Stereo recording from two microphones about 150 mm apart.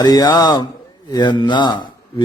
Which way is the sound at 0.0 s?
25° left (ahead or behind).